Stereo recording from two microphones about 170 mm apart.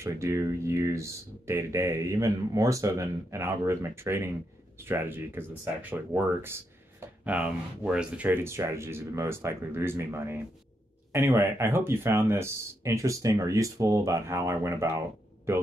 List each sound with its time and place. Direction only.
0.0 s speech: 15° right (ahead or behind)